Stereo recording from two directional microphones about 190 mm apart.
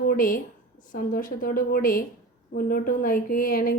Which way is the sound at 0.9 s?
45° left (ahead or behind).